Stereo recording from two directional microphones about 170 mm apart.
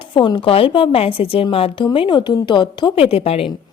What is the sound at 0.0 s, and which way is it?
Speech, 25° left (ahead or behind).